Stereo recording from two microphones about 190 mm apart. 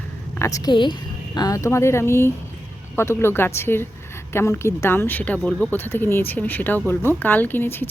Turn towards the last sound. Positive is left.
turn(degrees=10)  # may be behind; listen again after turning